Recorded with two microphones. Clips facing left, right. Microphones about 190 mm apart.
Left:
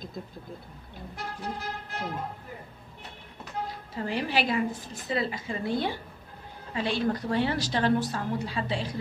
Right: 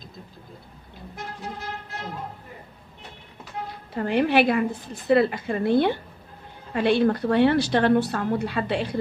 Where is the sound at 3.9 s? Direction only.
60° right (ahead or behind).